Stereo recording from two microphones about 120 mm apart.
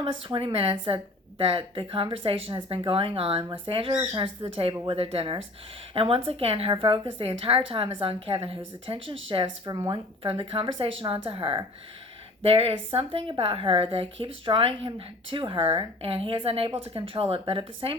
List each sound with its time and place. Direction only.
0.0 s a woman's voice: 45° right (ahead or behind)
9.6 s speech: 35° right (ahead or behind)
10.2 s a woman's voice: 50° right (ahead or behind)